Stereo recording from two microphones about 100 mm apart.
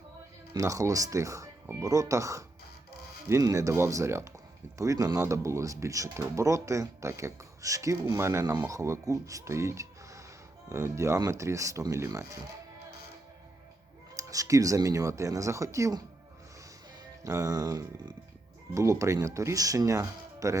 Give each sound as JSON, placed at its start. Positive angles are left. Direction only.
{"t": 0.5, "sound": "speech", "side_deg": -35}
{"t": 14.2, "sound": "speech", "side_deg": -35}
{"t": 17.2, "sound": "speech", "side_deg": -30}